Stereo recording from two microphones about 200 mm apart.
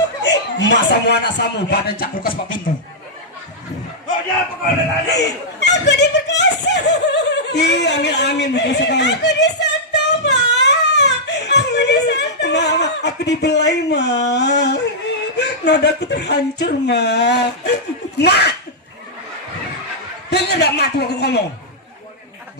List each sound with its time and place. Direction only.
0.2 s a woman's voice: 60° left (ahead or behind)
5.0 s a sound: 55° left (ahead or behind)
15.4 s a woman's voice: 60° left (ahead or behind)
20.3 s a woman's voice: 55° left (ahead or behind)